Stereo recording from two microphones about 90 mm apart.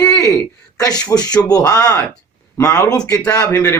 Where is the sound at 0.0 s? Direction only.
35° left (ahead or behind).